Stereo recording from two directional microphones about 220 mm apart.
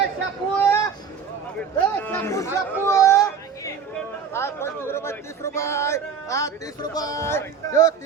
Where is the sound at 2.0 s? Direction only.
10° left (ahead or behind).